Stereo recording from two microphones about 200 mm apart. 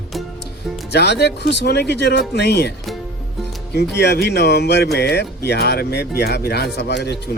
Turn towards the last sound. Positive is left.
turn(degrees=55)  # may be behind; listen again after turning